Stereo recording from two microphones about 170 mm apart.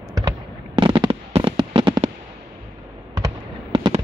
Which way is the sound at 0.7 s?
30° right (ahead or behind).